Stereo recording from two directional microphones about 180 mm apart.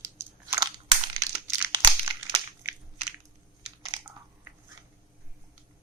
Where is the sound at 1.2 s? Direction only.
20° right (ahead or behind).